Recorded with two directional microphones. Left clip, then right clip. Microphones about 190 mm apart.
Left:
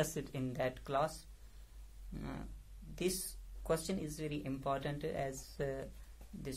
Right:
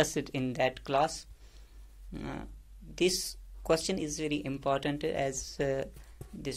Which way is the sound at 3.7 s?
35° right (ahead or behind).